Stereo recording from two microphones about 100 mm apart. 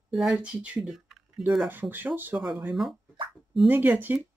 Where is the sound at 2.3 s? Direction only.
Centre (ahead or behind).